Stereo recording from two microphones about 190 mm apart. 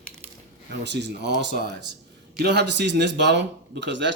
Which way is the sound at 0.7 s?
65° right (ahead or behind).